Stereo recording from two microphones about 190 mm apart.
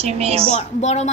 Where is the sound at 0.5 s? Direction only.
35° left (ahead or behind).